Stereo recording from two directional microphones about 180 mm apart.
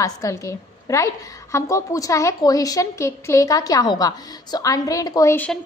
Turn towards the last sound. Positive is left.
turn(degrees=10)  # may be behind; listen again after turning